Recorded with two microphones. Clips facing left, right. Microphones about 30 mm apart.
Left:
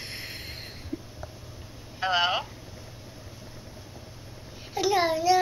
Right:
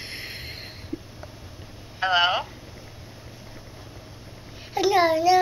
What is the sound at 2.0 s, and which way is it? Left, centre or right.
Speech, centre.